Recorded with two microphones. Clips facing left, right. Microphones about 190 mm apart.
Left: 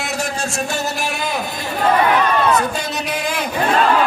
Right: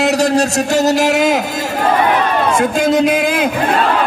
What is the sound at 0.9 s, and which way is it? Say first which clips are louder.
Speech: right 11 dB; 80° right.